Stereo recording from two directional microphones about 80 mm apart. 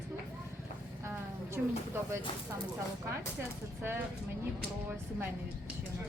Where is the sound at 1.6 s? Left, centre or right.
Centre.